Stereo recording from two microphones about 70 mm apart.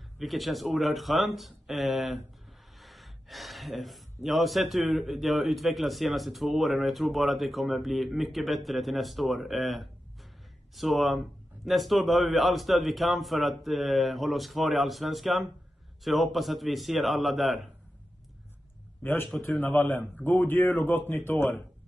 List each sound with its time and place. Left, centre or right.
0.2 s speech: centre
19.6 s speech: left